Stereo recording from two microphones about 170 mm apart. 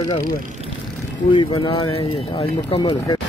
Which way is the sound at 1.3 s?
30° left (ahead or behind).